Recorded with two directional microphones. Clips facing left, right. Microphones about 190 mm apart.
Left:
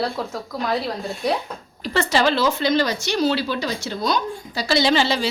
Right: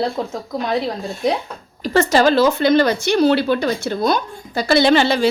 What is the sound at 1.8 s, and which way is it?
Speech, 45° right (ahead or behind).